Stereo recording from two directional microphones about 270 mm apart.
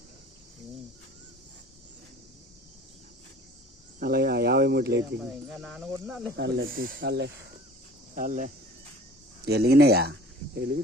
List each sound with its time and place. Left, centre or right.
4.0 s cricket: right
5.6 s cricket: centre
6.3 s speech: right
8.1 s speech: right